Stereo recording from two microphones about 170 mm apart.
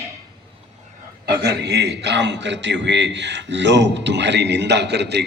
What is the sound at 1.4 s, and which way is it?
A man's voice, 85° right.